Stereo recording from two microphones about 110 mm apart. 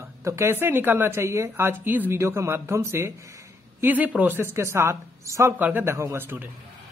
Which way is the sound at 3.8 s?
15° right (ahead or behind).